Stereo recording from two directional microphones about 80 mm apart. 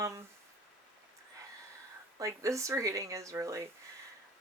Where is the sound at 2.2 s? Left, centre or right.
Right.